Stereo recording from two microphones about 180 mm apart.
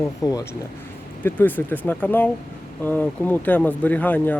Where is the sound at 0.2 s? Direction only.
20° left (ahead or behind).